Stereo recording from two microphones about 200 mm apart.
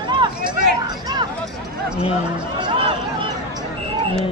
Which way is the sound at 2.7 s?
25° right (ahead or behind).